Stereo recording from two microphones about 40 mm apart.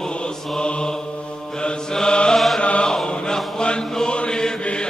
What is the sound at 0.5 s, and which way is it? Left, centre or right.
Mantra, left.